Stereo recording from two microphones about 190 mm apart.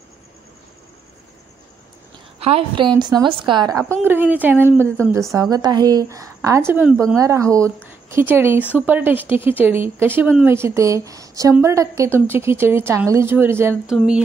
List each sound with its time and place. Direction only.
2.4 s a woman's voice: 30° right (ahead or behind)
4.0 s speech: 10° right (ahead or behind)
7.2 s speech: 15° right (ahead or behind)
13.9 s a sound: 5° right (ahead or behind)